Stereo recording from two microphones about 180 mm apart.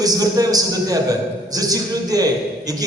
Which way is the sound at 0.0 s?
20° right (ahead or behind).